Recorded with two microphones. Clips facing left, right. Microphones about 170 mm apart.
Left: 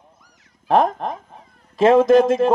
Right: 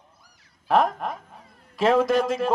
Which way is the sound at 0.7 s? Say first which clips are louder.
Left 4 dB; 25° left (ahead or behind).